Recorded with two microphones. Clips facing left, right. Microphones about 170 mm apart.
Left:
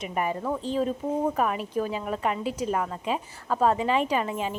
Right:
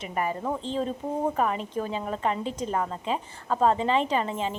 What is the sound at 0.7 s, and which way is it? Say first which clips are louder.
A woman's voice: left 5 dB; 10° left (ahead or behind).